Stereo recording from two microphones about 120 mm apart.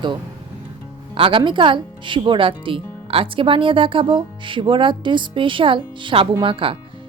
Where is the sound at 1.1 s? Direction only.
45° right (ahead or behind).